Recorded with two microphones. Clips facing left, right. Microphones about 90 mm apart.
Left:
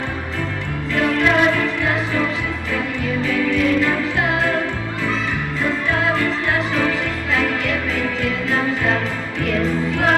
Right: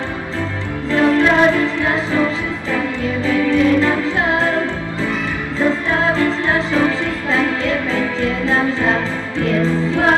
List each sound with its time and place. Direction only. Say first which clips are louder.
0.9 s music: right 4 dB; 30° right (ahead or behind)
2.7 s music: right 2 dB; 30° right (ahead or behind)
6.0 s music: right 3 dB; 30° right (ahead or behind)